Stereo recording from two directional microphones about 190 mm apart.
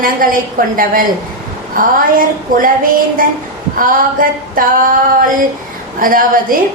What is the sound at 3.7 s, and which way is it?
Speech, 45° right (ahead or behind).